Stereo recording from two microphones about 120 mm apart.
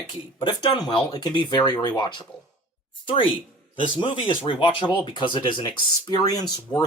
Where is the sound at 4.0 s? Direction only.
45° left (ahead or behind).